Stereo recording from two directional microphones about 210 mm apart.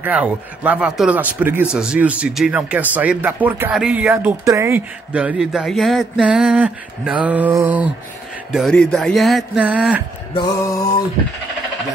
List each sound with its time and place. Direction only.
0.0 s speech: 5° right (ahead or behind)
10.3 s music: 15° left (ahead or behind)